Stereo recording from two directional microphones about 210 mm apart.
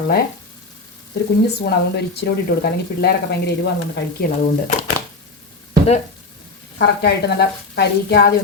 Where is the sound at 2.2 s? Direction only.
50° left (ahead or behind).